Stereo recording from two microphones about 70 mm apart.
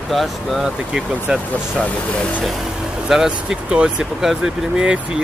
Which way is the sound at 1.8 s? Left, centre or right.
Left.